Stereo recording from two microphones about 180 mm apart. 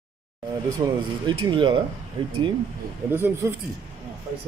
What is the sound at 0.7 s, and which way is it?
Speech, 20° right (ahead or behind).